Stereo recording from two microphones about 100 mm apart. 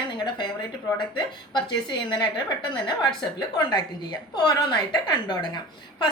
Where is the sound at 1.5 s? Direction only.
50° left (ahead or behind).